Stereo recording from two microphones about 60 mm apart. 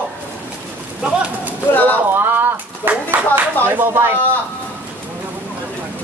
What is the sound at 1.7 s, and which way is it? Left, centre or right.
Speech, left.